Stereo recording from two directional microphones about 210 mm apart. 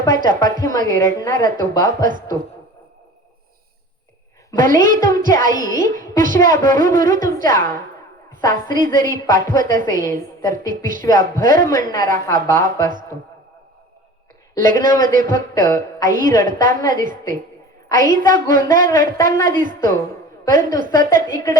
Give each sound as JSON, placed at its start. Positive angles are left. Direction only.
{"t": 0.1, "sound": "a woman's voice", "side_deg": -40}
{"t": 4.5, "sound": "a woman's voice", "side_deg": -40}
{"t": 8.7, "sound": "a woman's voice", "side_deg": -40}
{"t": 14.6, "sound": "a woman's voice", "side_deg": -40}